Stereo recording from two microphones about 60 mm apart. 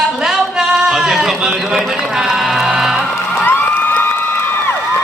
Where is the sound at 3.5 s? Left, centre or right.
Left.